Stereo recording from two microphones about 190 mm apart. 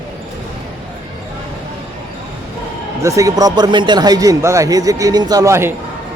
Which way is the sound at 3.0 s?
15° right (ahead or behind).